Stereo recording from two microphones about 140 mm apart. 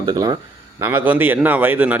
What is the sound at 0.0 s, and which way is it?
Speech, 30° right (ahead or behind).